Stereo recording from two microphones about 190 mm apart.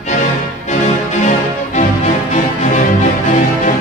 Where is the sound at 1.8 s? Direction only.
40° left (ahead or behind).